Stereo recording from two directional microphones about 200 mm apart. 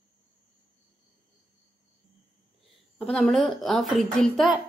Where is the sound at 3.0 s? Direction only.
5° left (ahead or behind).